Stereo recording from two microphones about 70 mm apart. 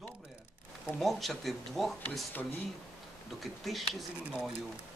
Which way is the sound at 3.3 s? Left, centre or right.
Centre.